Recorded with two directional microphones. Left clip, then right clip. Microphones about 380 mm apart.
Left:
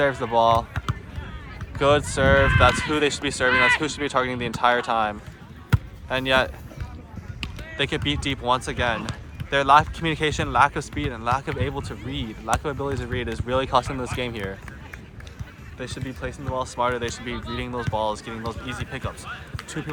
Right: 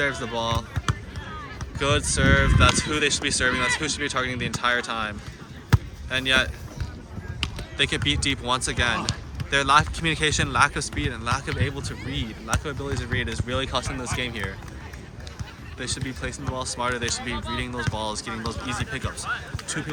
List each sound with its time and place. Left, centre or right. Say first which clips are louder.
0.0 s speech: left 6 dB; centre
1.8 s speech: left 4 dB; centre
7.4 s a sound: right 5 dB; right
7.8 s speech: right 2 dB; centre
15.8 s speech: right 1 dB; centre
17.3 s speech: right 2 dB; centre
17.6 s speech: left 3 dB; centre
19.5 s basketball bounce: right 2 dB; centre